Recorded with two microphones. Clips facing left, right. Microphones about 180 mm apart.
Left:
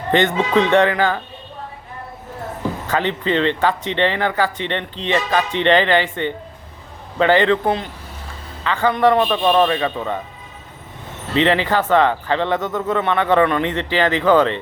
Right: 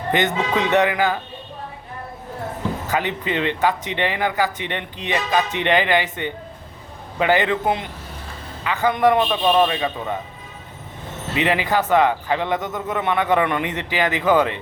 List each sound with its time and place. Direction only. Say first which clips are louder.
0.5 s speech: left 4 dB; 10° right (ahead or behind)
2.8 s speech: left 5 dB; 10° right (ahead or behind)
11.3 s speech: left 3 dB; 10° right (ahead or behind)